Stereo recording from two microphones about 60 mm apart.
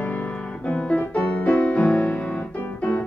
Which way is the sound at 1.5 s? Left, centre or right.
Left.